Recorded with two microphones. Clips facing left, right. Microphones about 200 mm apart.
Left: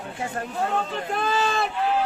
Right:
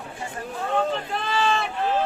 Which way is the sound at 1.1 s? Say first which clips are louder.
Left 4 dB; 45° left (ahead or behind).